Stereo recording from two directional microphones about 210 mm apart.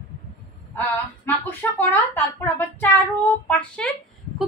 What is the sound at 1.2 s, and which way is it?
A woman's voice, 10° left (ahead or behind).